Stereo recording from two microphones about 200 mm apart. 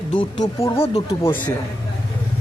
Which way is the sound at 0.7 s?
30° left (ahead or behind).